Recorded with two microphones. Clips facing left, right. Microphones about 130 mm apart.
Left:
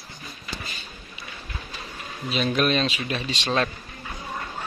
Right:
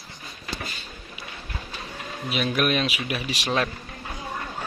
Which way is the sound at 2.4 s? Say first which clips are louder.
Left 1 dB; 10° right (ahead or behind).